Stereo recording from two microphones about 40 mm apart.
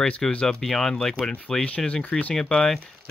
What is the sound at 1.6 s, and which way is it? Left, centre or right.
Speech, left.